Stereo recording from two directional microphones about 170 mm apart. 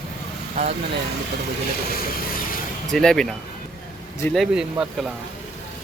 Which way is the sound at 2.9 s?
5° left (ahead or behind).